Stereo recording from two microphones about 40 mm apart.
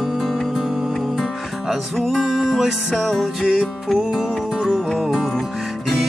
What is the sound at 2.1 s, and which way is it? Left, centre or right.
Music, centre.